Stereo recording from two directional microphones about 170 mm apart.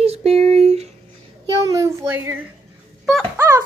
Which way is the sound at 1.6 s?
20° right (ahead or behind).